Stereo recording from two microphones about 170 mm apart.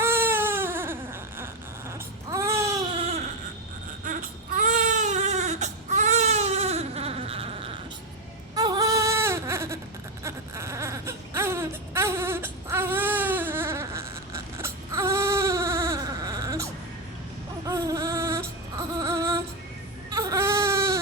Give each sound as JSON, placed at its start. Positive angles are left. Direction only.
{"t": 0.0, "sound": "baby cry", "side_deg": -15}
{"t": 2.3, "sound": "baby cry", "side_deg": -15}
{"t": 4.0, "sound": "baby cry", "side_deg": -50}
{"t": 8.5, "sound": "baby cry", "side_deg": -25}
{"t": 17.7, "sound": "a sound", "side_deg": -20}
{"t": 20.1, "sound": "baby cry", "side_deg": -20}